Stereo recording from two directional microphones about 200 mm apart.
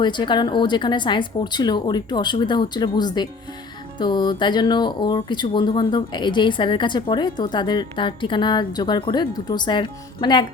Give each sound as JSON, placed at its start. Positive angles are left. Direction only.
{"t": 0.0, "sound": "speech", "side_deg": 20}